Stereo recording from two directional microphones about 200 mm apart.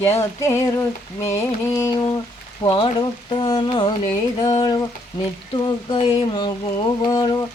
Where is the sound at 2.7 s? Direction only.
30° left (ahead or behind).